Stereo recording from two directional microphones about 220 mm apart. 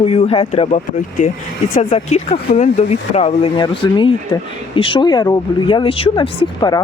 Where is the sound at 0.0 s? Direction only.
25° left (ahead or behind).